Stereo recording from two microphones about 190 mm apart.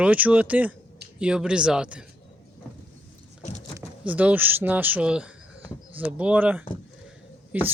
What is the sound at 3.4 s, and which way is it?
Vehicle, 35° left (ahead or behind).